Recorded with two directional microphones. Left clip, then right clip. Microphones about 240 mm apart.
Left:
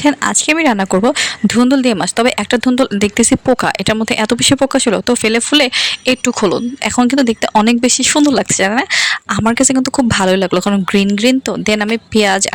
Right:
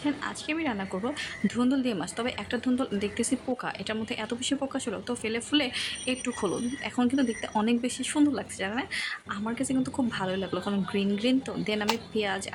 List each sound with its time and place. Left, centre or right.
0.0 s speech: left